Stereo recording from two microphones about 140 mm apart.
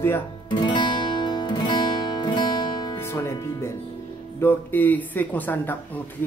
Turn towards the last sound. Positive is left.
turn(degrees=15)  # may be behind; listen again after turning